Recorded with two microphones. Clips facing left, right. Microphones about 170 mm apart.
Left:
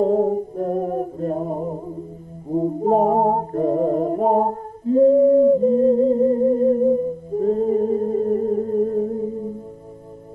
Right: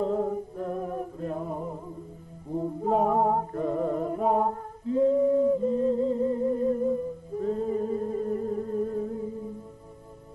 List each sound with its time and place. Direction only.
0.0 s music: 40° left (ahead or behind)